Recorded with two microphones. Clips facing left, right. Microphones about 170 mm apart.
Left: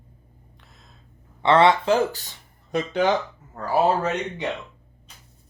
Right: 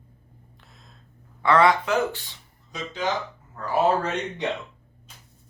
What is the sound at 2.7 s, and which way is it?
Speech, 60° left (ahead or behind).